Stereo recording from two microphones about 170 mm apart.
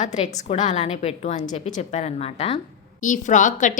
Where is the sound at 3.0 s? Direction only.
50° left (ahead or behind).